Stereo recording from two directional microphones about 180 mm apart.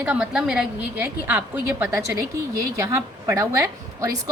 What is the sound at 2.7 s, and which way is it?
A woman's voice, 15° right (ahead or behind).